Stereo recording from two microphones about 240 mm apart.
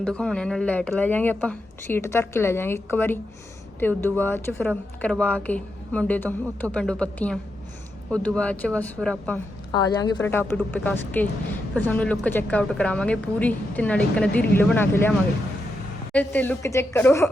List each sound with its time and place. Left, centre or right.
0.0 s a woman's voice: centre
9.7 s a woman's voice: centre
16.1 s speech: centre